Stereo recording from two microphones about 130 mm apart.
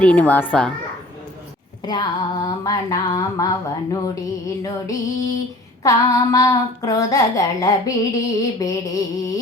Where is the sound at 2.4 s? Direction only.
25° left (ahead or behind).